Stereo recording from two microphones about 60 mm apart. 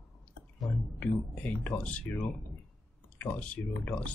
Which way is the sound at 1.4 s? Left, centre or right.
Left.